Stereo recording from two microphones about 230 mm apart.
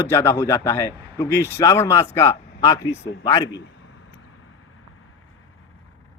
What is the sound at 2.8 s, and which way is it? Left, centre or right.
Speech, left.